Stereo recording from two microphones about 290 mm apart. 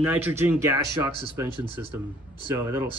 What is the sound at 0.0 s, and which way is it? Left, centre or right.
Speech, centre.